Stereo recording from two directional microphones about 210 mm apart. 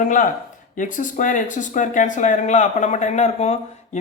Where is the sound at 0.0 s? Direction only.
40° left (ahead or behind).